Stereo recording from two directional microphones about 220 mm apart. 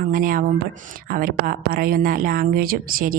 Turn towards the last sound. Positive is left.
turn(degrees=-40)  # may be behind; listen again after turning